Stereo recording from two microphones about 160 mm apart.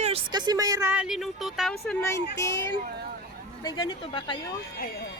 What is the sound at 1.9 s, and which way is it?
Speech, 15° left (ahead or behind).